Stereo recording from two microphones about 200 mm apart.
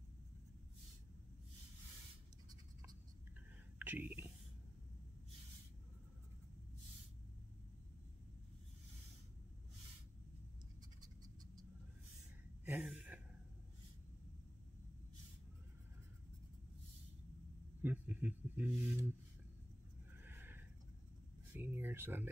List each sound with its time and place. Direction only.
3.8 s speech: 10° right (ahead or behind)
11.0 s scratch: 20° right (ahead or behind)
12.6 s gasp: 5° right (ahead or behind)
17.8 s a sound: 10° right (ahead or behind)
20.2 s neigh: 10° right (ahead or behind)
21.5 s a sound: 10° right (ahead or behind)